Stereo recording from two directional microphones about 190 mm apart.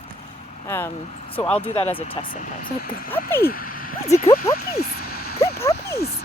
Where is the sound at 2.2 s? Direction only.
45° left (ahead or behind).